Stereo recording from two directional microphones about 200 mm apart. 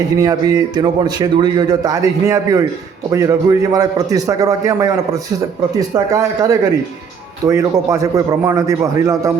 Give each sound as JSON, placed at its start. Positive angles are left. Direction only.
{"t": 0.2, "sound": "speech", "side_deg": -20}